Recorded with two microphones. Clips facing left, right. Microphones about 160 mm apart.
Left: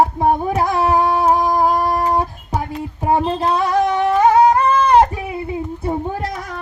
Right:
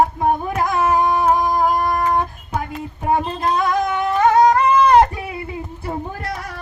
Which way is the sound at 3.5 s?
30° left (ahead or behind).